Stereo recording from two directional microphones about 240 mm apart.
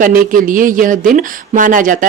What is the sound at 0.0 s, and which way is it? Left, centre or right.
Speech, right.